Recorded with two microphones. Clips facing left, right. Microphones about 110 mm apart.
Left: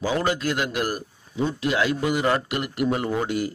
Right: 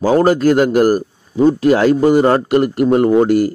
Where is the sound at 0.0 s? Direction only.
40° right (ahead or behind).